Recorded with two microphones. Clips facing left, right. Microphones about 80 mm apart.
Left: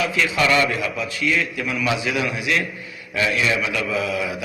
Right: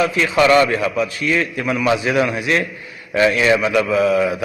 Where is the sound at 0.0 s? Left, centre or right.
Right.